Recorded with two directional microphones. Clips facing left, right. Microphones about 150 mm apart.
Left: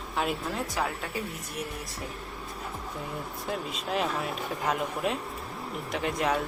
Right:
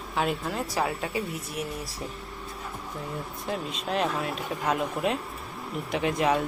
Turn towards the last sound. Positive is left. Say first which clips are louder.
# right 3 dB
turn(degrees=0)  # may be behind; listen again after turning